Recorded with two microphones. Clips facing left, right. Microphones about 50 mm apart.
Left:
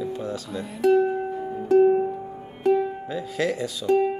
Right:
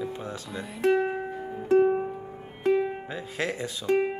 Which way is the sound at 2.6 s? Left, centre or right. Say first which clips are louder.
Left 3 dB; right.